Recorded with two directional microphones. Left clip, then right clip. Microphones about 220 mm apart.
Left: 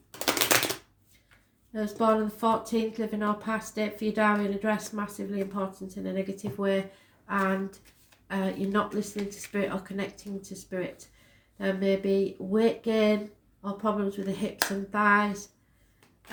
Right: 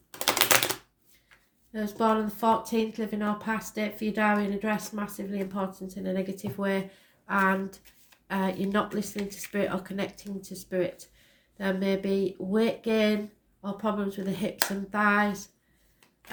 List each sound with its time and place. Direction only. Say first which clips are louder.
0.1 s typewriter: right 1 dB; 25° right (ahead or behind)
1.7 s speech: left 1 dB; 40° right (ahead or behind)